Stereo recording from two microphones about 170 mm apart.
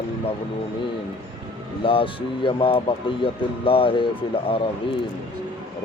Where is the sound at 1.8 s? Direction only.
30° left (ahead or behind).